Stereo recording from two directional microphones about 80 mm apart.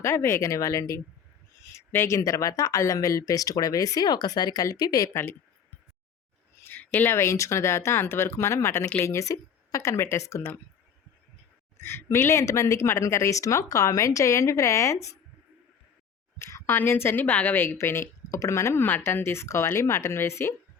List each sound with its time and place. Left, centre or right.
0.0 s speech: left
1.7 s speech: left
5.1 s speech: left
6.6 s a sound: left
7.0 s speech: left
11.8 s a woman's voice: left
16.4 s speech: left
18.8 s speech: left